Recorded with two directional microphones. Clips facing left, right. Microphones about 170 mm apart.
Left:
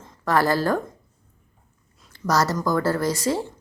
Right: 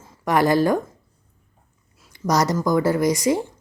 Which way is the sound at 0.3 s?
15° right (ahead or behind).